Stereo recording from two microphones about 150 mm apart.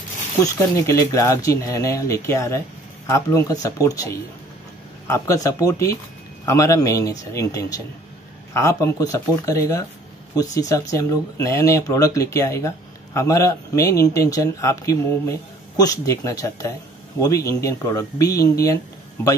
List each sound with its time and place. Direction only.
0.4 s speech: 20° left (ahead or behind)